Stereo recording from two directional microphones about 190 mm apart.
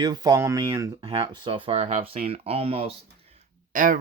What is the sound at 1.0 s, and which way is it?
Speech, 25° right (ahead or behind).